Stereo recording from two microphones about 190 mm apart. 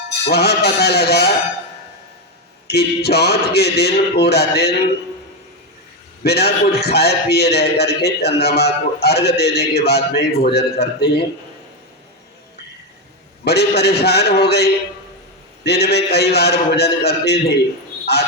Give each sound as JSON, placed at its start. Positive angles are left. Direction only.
{"t": 0.3, "sound": "a man's voice", "side_deg": 60}
{"t": 2.6, "sound": "a man's voice", "side_deg": 60}
{"t": 6.2, "sound": "a man's voice", "side_deg": 60}
{"t": 13.4, "sound": "a man's voice", "side_deg": 60}